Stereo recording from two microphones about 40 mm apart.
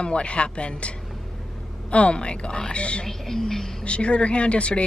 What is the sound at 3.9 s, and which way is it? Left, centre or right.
Speech, left.